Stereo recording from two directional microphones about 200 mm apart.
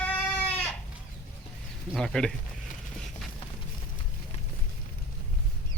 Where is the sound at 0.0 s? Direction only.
10° left (ahead or behind).